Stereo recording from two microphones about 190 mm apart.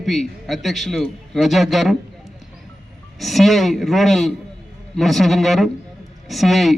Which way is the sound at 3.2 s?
Centre (ahead or behind).